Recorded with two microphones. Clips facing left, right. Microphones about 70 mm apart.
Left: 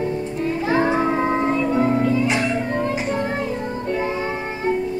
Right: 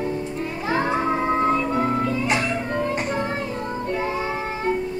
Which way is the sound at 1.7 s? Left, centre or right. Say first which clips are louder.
Left 4 dB; centre.